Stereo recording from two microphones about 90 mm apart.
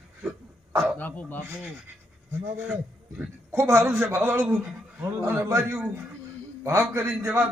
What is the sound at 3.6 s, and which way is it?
A man's voice, 30° right (ahead or behind).